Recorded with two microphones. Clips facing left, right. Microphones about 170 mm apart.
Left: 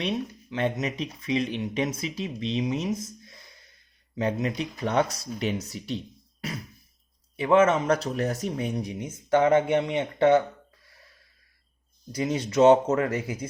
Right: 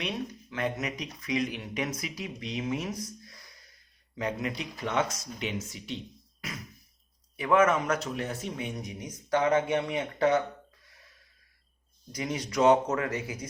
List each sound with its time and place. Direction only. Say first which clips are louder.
0.5 s speech: left 5 dB; 25° left (ahead or behind)
6.4 s music: left 6 dB; 30° left (ahead or behind)
7.3 s speech: left 4 dB; 25° left (ahead or behind)
12.1 s speech: left 6 dB; 30° left (ahead or behind)